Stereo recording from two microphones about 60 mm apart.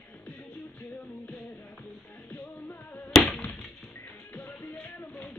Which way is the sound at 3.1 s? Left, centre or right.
Centre.